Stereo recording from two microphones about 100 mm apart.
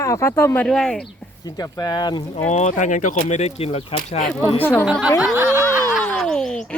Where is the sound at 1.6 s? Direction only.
40° left (ahead or behind).